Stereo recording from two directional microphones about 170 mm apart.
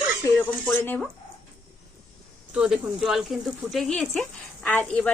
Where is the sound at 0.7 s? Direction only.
10° left (ahead or behind).